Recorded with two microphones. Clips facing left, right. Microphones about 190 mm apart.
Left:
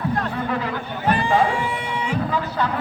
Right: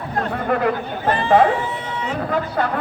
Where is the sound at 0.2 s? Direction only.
50° right (ahead or behind).